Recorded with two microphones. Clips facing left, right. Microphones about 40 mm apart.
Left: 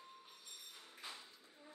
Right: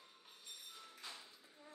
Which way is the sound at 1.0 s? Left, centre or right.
Left.